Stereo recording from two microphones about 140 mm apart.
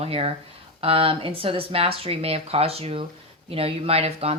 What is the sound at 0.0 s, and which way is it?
Speech, 45° right (ahead or behind).